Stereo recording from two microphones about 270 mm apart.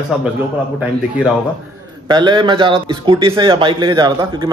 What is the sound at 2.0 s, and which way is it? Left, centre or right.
A man's voice, centre.